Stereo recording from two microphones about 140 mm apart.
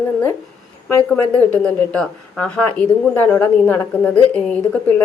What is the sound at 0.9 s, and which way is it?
A woman's voice, 15° left (ahead or behind).